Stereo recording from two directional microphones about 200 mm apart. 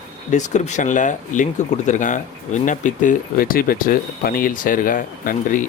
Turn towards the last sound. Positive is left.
turn(degrees=40)  # may be behind; listen again after turning